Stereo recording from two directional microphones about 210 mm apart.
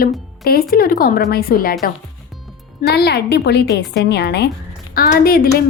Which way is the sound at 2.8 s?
50° left (ahead or behind).